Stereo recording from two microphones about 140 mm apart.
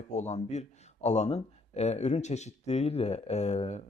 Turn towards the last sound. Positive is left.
turn(degrees=50)  # may be behind; listen again after turning